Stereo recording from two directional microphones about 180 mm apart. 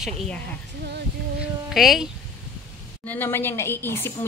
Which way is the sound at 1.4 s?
Centre (ahead or behind).